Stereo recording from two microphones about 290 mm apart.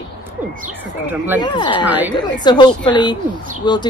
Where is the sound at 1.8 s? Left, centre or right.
Centre.